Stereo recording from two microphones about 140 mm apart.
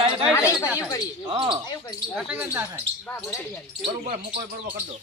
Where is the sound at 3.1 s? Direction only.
15° left (ahead or behind).